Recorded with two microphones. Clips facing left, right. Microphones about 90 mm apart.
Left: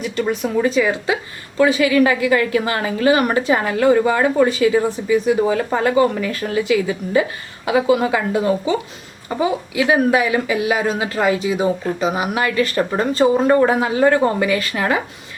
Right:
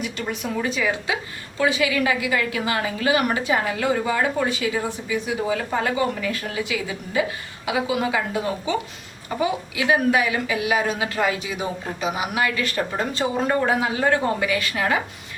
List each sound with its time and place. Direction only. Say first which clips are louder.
0.0 s a woman's voice: left 7 dB; 40° left (ahead or behind)